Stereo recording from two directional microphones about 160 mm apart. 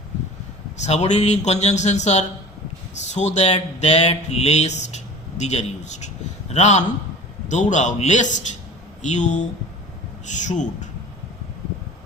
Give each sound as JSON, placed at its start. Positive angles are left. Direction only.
{"t": 0.8, "sound": "speech", "side_deg": 45}